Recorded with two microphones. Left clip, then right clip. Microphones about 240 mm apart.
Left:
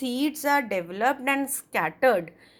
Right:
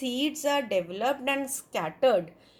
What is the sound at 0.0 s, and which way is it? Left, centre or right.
A woman's voice, left.